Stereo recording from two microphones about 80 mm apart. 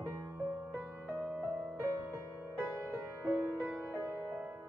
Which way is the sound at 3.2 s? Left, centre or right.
Right.